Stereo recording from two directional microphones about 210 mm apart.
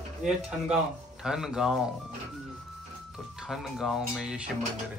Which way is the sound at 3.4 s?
Centre (ahead or behind).